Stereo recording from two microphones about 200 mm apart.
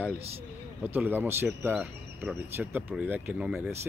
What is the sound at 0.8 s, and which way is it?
Speech, 10° right (ahead or behind).